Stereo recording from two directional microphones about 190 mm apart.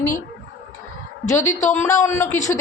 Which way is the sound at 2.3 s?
40° left (ahead or behind).